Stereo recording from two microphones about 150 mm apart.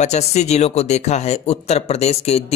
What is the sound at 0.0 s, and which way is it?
Speech, 50° left (ahead or behind).